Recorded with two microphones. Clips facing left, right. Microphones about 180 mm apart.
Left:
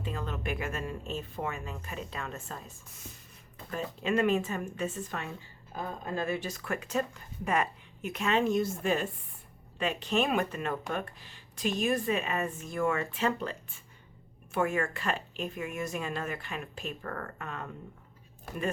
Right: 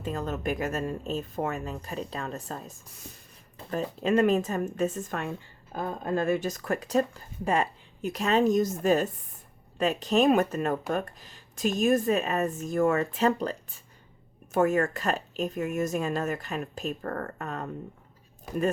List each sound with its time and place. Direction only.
0.0 s speech: 40° right (ahead or behind)
3.6 s music: 35° right (ahead or behind)
4.0 s speech: 40° right (ahead or behind)